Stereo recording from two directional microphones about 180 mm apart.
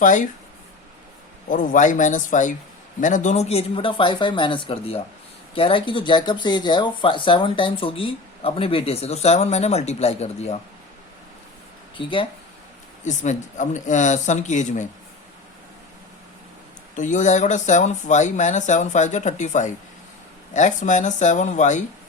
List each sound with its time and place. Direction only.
0.0 s speech: 45° left (ahead or behind)
1.5 s speech: 50° left (ahead or behind)
11.9 s speech: 30° left (ahead or behind)
13.1 s speech: 40° left (ahead or behind)
16.9 s speech: 45° left (ahead or behind)